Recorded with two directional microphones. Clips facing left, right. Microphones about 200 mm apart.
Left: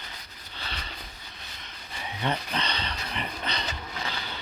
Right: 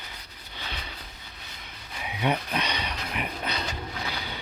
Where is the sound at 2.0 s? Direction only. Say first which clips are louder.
Right 3 dB; 10° right (ahead or behind).